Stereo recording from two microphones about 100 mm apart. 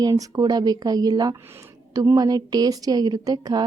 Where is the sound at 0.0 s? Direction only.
35° right (ahead or behind).